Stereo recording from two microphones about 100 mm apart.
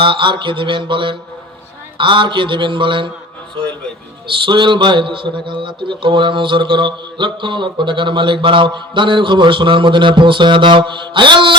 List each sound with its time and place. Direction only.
0.0 s a man's voice: 55° right (ahead or behind)
4.3 s a man's voice: 55° right (ahead or behind)